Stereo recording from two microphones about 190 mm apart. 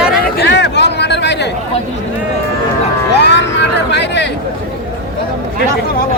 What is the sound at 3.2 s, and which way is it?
Speech, 65° left (ahead or behind).